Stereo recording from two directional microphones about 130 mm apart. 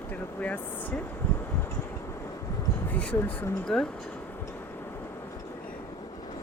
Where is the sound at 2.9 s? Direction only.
10° left (ahead or behind).